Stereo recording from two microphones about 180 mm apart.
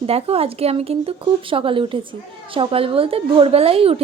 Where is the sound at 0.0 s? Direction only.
35° right (ahead or behind).